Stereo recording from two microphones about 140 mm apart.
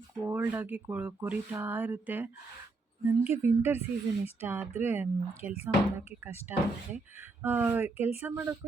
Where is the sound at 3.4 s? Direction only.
55° left (ahead or behind).